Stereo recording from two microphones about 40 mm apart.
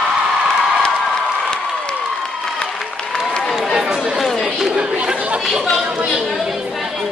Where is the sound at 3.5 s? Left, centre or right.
Centre.